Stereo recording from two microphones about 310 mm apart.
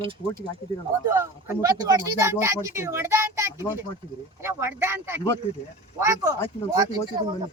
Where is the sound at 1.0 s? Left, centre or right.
Centre.